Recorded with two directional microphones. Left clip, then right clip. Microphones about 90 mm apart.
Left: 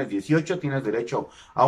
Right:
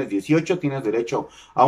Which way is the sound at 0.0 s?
30° right (ahead or behind).